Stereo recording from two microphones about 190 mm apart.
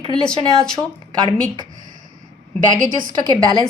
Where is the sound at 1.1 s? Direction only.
20° right (ahead or behind).